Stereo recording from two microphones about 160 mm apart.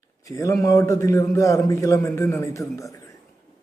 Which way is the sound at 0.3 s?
20° left (ahead or behind).